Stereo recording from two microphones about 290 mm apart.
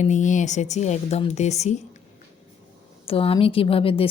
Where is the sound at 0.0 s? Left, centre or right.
Left.